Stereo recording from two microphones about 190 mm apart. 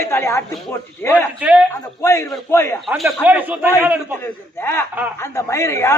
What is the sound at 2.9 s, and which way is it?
Speech, 5° right (ahead or behind).